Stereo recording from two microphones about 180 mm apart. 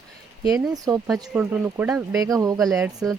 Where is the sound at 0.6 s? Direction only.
20° right (ahead or behind).